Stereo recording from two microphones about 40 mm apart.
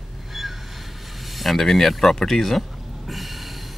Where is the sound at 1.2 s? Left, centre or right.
Centre.